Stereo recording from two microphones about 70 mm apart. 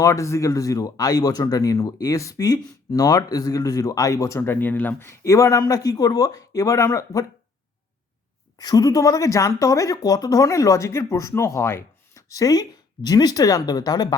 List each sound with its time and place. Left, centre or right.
0.0 s speech: left
5.2 s speech: left
8.5 s speech: left
12.3 s speech: left
13.1 s speech: left